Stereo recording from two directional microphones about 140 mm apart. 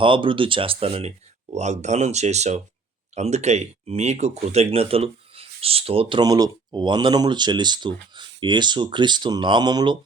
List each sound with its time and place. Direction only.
0.0 s speech: 35° right (ahead or behind)